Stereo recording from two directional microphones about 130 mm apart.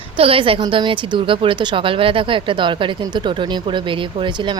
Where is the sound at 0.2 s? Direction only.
45° right (ahead or behind).